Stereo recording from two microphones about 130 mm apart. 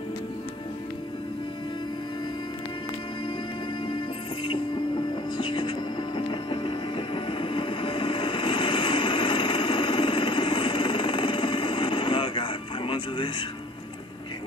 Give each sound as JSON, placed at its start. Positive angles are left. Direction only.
{"t": 3.8, "sound": "music", "side_deg": 40}